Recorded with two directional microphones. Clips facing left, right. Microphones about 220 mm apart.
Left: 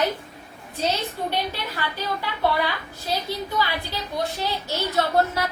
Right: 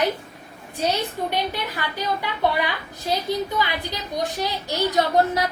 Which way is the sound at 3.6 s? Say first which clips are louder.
Right 1 dB; 15° right (ahead or behind).